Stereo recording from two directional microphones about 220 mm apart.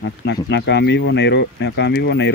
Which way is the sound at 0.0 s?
55° left (ahead or behind).